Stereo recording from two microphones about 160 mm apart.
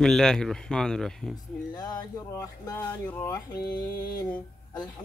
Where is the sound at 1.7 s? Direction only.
25° left (ahead or behind).